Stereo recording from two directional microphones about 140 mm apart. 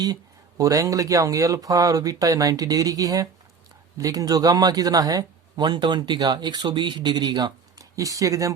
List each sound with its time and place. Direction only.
0.0 s speech: 25° right (ahead or behind)